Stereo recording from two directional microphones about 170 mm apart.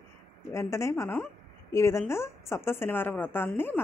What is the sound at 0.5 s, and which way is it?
Speech, 15° left (ahead or behind).